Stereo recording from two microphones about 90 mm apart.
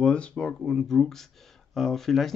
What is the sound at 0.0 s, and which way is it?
Speech, 10° left (ahead or behind).